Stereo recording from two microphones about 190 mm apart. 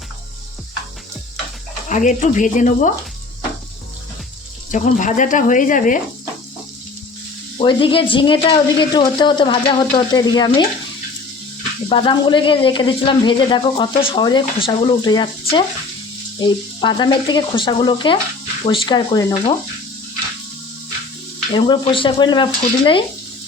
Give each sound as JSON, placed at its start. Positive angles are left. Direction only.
{"t": 1.9, "sound": "speech", "side_deg": 40}
{"t": 4.7, "sound": "speech", "side_deg": 40}
{"t": 7.6, "sound": "speech", "side_deg": 25}
{"t": 11.9, "sound": "speech", "side_deg": 25}
{"t": 21.5, "sound": "speech", "side_deg": 25}